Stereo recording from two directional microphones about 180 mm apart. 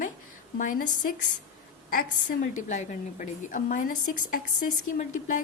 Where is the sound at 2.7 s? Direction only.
45° left (ahead or behind).